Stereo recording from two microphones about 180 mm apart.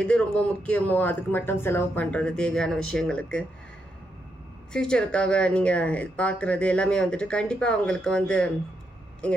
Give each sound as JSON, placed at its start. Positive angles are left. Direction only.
{"t": 0.0, "sound": "speech", "side_deg": 5}
{"t": 4.7, "sound": "speech", "side_deg": 5}